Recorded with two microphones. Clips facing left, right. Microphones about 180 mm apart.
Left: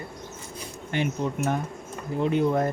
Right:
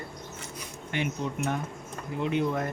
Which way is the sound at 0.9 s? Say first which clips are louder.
Left 4 dB; 35° left (ahead or behind).